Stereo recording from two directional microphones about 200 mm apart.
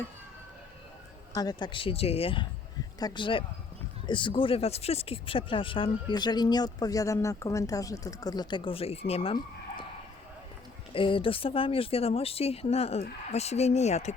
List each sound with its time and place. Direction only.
1.4 s speech: 20° left (ahead or behind)
10.9 s speech: 25° left (ahead or behind)